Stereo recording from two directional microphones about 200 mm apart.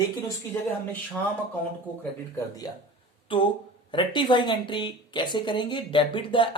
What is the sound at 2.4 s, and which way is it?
Speech, 20° left (ahead or behind).